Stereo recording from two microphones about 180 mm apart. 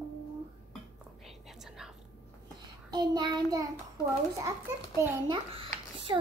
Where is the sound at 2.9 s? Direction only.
25° right (ahead or behind).